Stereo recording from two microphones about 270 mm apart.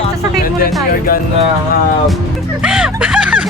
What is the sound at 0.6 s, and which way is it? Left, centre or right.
Music, left.